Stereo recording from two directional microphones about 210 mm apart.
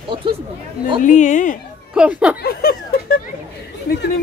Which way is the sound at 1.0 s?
35° left (ahead or behind).